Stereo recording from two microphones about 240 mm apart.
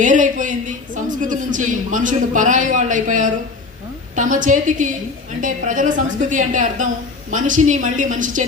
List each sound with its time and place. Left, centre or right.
0.0 s a woman's voice: right